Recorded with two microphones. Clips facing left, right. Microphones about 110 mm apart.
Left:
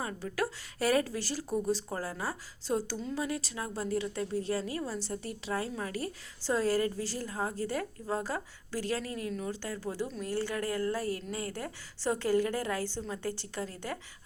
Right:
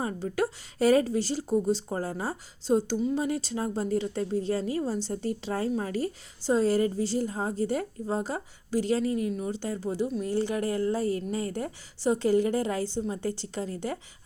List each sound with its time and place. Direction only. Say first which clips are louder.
0.0 s speech: right 5 dB; 30° right (ahead or behind)